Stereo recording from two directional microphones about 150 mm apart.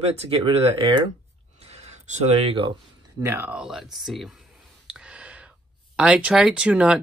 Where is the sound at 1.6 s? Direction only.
45° right (ahead or behind).